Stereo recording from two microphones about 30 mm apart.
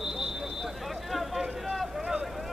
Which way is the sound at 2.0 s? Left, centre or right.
Right.